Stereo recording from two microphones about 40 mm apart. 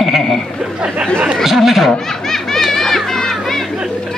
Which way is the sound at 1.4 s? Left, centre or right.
Centre.